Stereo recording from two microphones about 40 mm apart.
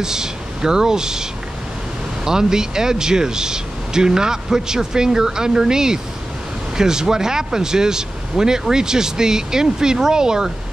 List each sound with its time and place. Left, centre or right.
0.0 s speech: centre
2.2 s speech: centre